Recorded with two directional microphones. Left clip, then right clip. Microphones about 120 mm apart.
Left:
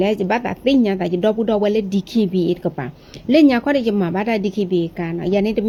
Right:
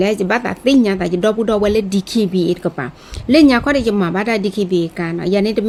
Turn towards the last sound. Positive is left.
turn(degrees=-30)  # may be behind; listen again after turning